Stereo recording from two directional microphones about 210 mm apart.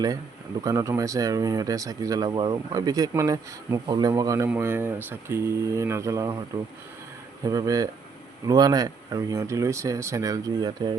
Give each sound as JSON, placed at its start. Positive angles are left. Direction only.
{"t": 0.6, "sound": "speech", "side_deg": -15}
{"t": 7.4, "sound": "speech", "side_deg": -15}